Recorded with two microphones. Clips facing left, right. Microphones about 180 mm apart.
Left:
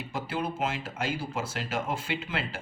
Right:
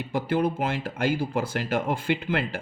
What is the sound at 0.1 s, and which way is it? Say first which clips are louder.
Speech: right 8 dB; 55° right (ahead or behind).